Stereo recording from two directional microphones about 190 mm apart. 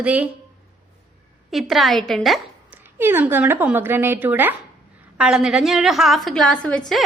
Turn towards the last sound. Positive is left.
turn(degrees=5)  # may be behind; listen again after turning